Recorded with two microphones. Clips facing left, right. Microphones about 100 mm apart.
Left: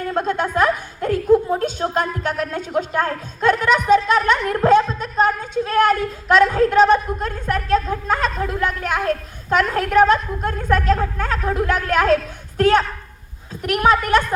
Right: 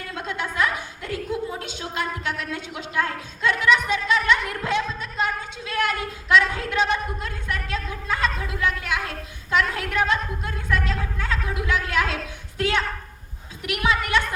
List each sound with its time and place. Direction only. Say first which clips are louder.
0.1 s a woman's voice: left 9 dB; 45° left (ahead or behind)